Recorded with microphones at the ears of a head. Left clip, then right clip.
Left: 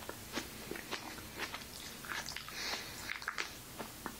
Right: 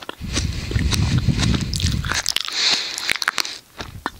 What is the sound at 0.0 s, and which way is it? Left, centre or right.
Biting, right.